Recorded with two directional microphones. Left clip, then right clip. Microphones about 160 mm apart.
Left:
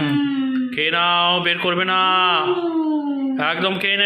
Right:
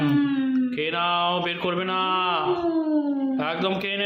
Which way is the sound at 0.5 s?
Centre (ahead or behind).